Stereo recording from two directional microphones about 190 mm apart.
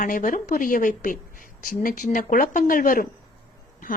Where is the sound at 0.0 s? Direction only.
45° left (ahead or behind).